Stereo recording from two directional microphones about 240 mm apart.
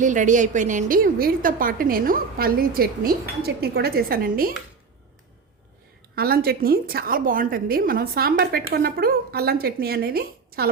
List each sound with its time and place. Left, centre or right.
0.0 s a woman's voice: right
6.1 s a woman's voice: right